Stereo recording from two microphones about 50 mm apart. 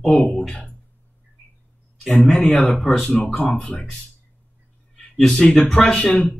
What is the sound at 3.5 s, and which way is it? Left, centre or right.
Speech, left.